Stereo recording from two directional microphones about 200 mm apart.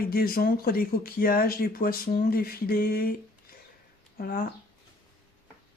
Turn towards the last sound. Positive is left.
turn(degrees=45)  # may be behind; listen again after turning